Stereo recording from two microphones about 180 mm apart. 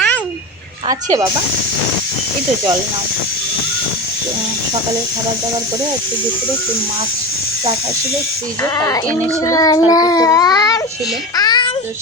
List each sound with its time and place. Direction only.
0.9 s speech: 20° right (ahead or behind)
8.6 s a child's voice: 15° left (ahead or behind)
11.3 s babbling: 25° left (ahead or behind)